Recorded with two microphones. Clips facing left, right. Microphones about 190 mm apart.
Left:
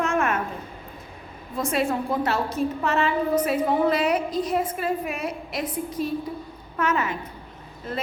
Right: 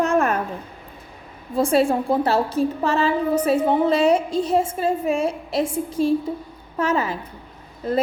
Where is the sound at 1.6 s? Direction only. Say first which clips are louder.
Right 6 dB; 30° right (ahead or behind).